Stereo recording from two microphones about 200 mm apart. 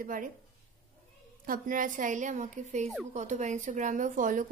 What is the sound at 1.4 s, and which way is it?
Speech, 45° right (ahead or behind).